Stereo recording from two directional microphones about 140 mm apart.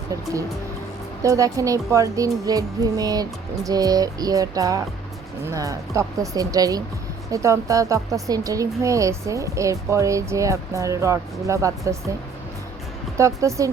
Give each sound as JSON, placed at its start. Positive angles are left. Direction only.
{"t": 1.2, "sound": "speech", "side_deg": -25}
{"t": 13.1, "sound": "speech", "side_deg": -20}